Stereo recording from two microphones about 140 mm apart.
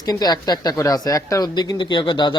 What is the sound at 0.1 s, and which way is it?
Speech, 30° left (ahead or behind).